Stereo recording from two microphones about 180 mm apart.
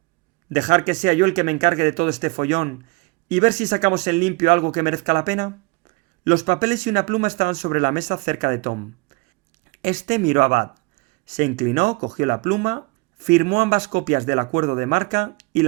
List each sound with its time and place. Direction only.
0.5 s speech: 45° right (ahead or behind)